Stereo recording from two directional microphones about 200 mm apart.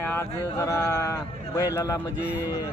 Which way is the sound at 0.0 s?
10° left (ahead or behind).